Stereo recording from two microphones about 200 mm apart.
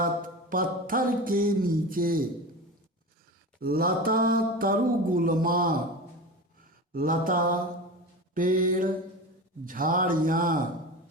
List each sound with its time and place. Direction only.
0.5 s mantra: 45° right (ahead or behind)
3.6 s mantra: 50° right (ahead or behind)
6.9 s mantra: 45° right (ahead or behind)